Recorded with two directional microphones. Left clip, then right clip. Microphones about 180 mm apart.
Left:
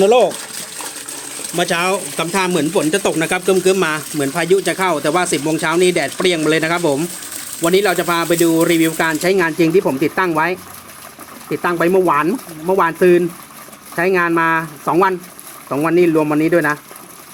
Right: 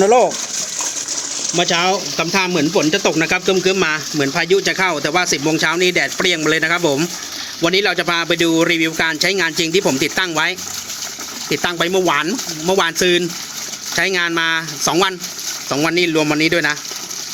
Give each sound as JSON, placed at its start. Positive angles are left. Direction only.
{"t": 0.0, "sound": "speech", "side_deg": -5}
{"t": 1.5, "sound": "speech", "side_deg": 0}